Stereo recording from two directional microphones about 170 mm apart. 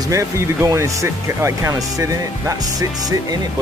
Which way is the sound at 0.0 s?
20° right (ahead or behind).